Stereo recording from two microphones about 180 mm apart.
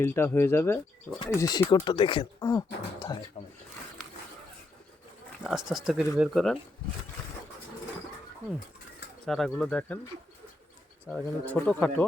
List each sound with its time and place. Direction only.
0.0 s speech: 15° left (ahead or behind)
5.4 s speech: centre (ahead or behind)
9.2 s speech: centre (ahead or behind)
11.1 s speech: 10° left (ahead or behind)